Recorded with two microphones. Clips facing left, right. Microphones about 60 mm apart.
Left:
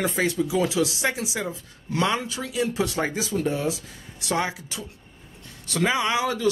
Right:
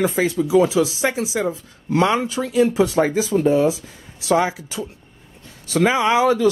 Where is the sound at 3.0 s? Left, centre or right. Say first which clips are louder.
Right 8 dB; centre.